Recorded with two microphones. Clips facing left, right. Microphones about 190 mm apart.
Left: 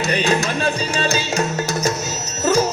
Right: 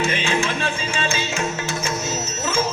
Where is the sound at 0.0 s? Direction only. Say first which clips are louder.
Left 3 dB; 40° left (ahead or behind).